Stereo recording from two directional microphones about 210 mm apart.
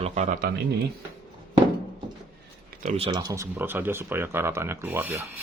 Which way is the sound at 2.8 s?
25° right (ahead or behind).